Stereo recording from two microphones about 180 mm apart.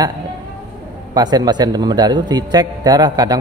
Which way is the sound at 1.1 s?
20° right (ahead or behind).